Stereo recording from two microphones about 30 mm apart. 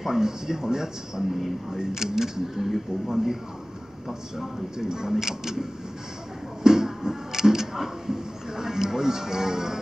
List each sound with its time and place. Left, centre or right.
0.0 s a man's voice: centre
2.4 s speech: centre
4.7 s a man's voice: centre
6.6 s music: centre